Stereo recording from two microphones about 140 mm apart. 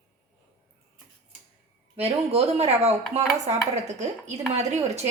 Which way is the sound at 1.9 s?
45° right (ahead or behind).